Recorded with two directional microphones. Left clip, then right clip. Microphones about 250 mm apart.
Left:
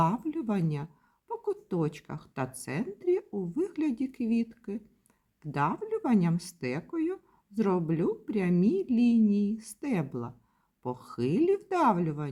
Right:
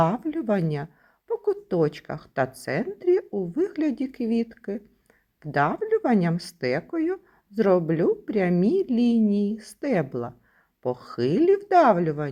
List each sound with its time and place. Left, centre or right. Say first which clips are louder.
0.0 s speech: right 5 dB; centre
10.8 s speech: right 8 dB; left
11.1 s speech: right 6 dB; centre